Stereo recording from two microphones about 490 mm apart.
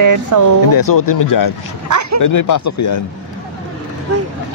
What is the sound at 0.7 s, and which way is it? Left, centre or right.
Speech, left.